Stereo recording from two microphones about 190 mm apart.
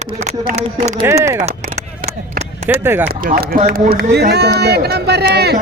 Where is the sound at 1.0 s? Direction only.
15° right (ahead or behind).